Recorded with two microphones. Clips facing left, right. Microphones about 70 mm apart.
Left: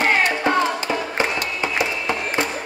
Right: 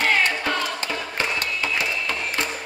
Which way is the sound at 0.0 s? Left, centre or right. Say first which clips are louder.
Left 3 dB; left.